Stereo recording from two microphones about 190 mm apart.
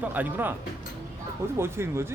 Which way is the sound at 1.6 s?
15° right (ahead or behind).